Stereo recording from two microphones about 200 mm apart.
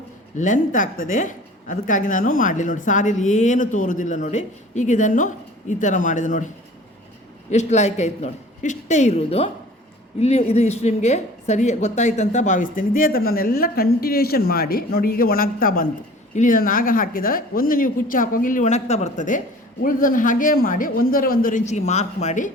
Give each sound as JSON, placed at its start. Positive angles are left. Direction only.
{"t": 0.3, "sound": "a woman's voice", "side_deg": 40}
{"t": 7.5, "sound": "a woman's voice", "side_deg": 35}